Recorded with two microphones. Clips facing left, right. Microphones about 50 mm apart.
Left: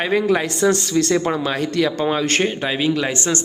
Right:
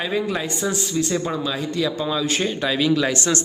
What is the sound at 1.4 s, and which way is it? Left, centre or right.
Speech, left.